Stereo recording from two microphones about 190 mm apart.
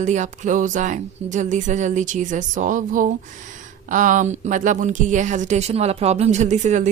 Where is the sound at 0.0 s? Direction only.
40° right (ahead or behind).